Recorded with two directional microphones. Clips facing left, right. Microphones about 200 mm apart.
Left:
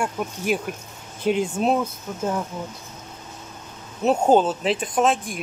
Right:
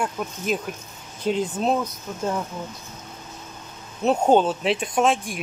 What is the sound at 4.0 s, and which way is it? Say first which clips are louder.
Speech: left 1 dB; 5° left (ahead or behind).